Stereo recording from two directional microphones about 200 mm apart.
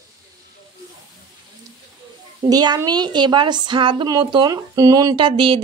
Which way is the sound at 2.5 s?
20° right (ahead or behind).